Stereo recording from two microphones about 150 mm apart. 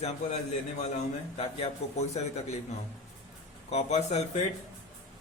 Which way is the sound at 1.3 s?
45° left (ahead or behind).